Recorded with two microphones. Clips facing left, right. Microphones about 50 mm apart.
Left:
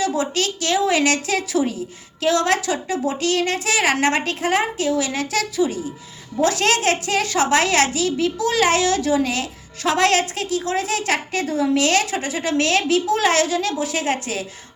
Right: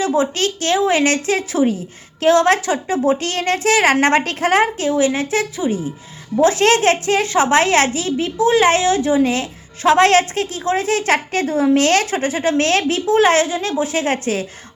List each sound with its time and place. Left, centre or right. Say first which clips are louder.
0.0 s a woman's voice: right 4 dB; right
4.9 s a woman's voice: right 5 dB; right